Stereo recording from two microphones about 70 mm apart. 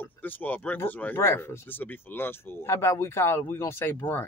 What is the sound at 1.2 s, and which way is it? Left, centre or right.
Speech, left.